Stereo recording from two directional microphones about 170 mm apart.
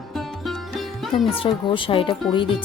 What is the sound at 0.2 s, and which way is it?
Music, centre (ahead or behind).